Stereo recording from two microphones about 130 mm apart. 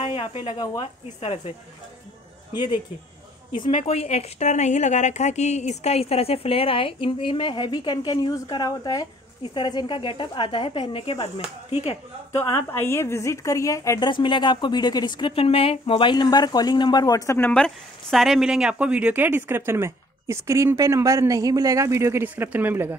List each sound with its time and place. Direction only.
0.0 s a sound: 45° left (ahead or behind)
0.6 s a woman's voice: 35° left (ahead or behind)
2.5 s a woman's voice: 35° left (ahead or behind)
3.7 s a woman's voice: 55° left (ahead or behind)
12.7 s a woman's voice: 20° left (ahead or behind)
17.4 s speech: 5° left (ahead or behind); by 22.9 s 15° right (ahead or behind)